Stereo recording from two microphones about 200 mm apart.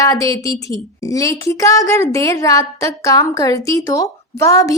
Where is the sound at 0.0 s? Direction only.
15° left (ahead or behind).